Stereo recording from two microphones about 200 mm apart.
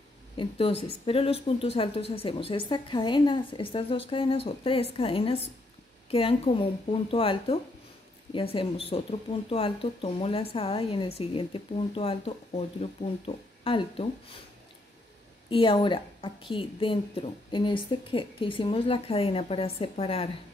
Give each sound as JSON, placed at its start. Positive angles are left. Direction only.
{"t": 0.4, "sound": "a woman's voice", "side_deg": 30}
{"t": 15.5, "sound": "a woman's voice", "side_deg": 25}